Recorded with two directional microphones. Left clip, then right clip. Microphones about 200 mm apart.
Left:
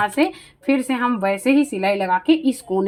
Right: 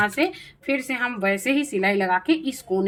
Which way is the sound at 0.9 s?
25° left (ahead or behind).